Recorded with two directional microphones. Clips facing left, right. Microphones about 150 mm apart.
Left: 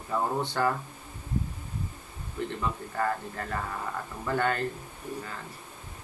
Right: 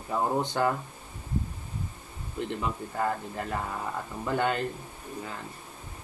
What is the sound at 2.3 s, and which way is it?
Speech, 20° right (ahead or behind).